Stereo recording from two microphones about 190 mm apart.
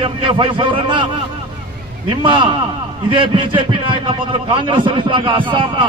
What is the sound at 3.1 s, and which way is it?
A man's voice, 25° right (ahead or behind).